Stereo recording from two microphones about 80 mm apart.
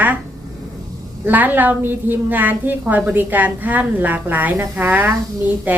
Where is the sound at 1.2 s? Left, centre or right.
Right.